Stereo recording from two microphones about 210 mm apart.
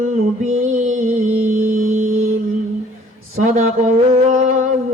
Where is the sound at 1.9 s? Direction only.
80° right.